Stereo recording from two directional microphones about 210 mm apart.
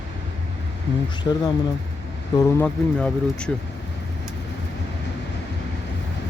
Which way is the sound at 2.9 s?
5° left (ahead or behind).